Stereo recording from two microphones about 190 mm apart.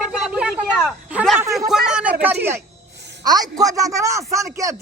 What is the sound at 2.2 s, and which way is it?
A man's voice, 10° right (ahead or behind).